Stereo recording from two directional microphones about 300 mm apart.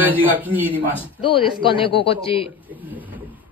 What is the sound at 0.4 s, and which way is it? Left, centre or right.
Speech, centre.